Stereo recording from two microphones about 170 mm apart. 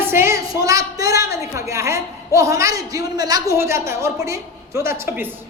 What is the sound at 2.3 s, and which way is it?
A woman's voice, 20° right (ahead or behind).